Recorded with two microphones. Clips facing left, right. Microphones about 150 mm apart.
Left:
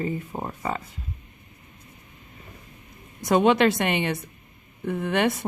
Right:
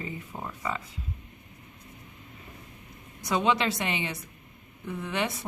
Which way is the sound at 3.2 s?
60° left (ahead or behind).